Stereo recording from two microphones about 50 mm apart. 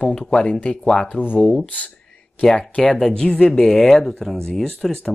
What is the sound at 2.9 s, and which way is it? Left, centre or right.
Speech, centre.